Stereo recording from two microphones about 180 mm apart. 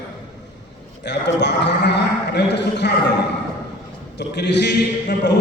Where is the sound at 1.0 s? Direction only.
75° left (ahead or behind).